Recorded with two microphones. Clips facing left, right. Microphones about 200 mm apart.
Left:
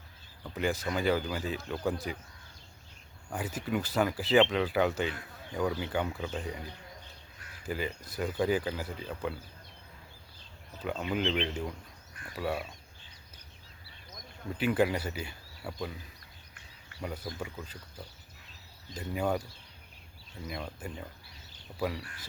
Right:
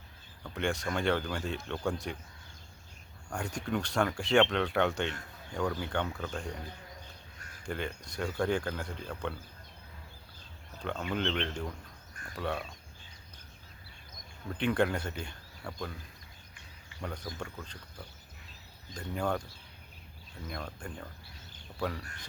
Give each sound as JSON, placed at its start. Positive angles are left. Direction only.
{"t": 0.4, "sound": "speech", "side_deg": 5}
{"t": 3.2, "sound": "speech", "side_deg": 5}
{"t": 7.3, "sound": "a sound", "side_deg": -45}
{"t": 7.6, "sound": "speech", "side_deg": 5}
{"t": 10.8, "sound": "speech", "side_deg": 5}
{"t": 14.6, "sound": "speech", "side_deg": 5}
{"t": 17.0, "sound": "speech", "side_deg": 5}
{"t": 20.5, "sound": "speech", "side_deg": 5}